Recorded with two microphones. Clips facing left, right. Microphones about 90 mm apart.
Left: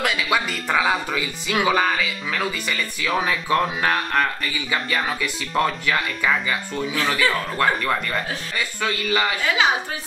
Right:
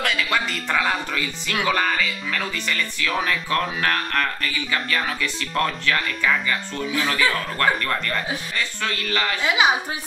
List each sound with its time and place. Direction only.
0.0 s speech: 5° left (ahead or behind)
9.4 s a woman's voice: 15° right (ahead or behind)